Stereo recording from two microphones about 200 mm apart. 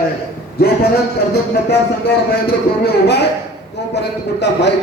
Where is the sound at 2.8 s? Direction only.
55° left (ahead or behind).